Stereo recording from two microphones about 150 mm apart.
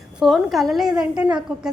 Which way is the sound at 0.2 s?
Centre (ahead or behind).